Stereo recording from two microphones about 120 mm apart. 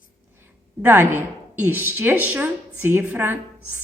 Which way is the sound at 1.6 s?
15° right (ahead or behind).